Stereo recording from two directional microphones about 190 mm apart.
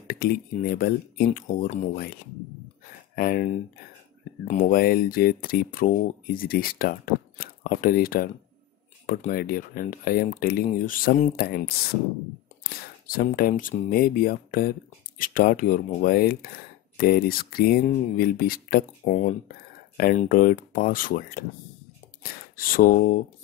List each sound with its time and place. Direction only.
0.0 s speech: 50° left (ahead or behind)
3.2 s speech: 50° left (ahead or behind)
4.5 s speech: 45° left (ahead or behind)
13.0 s speech: 50° left (ahead or behind)
22.6 s speech: 45° left (ahead or behind)